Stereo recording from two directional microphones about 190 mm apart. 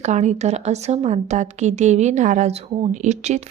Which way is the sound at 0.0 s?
35° right (ahead or behind).